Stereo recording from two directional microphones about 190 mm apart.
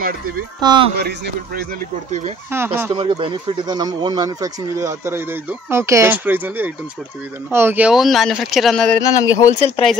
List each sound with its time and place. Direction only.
0.6 s speech: 25° right (ahead or behind)
0.9 s a man's voice: 55° right (ahead or behind)
2.5 s speech: 10° right (ahead or behind)
2.9 s speech: 25° right (ahead or behind); by 9.0 s 5° left (ahead or behind)
9.0 s speech: 15° left (ahead or behind)
9.8 s speech: 35° left (ahead or behind)